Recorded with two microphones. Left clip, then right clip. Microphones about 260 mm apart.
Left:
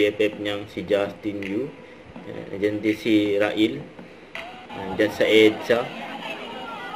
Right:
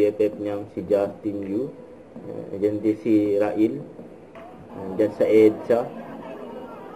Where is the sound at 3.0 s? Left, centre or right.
Centre.